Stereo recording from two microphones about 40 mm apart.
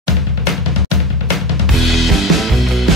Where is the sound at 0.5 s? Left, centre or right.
Centre.